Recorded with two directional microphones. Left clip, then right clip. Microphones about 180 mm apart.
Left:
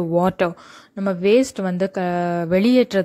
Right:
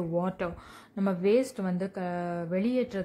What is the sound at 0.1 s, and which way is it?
Speech, 40° left (ahead or behind).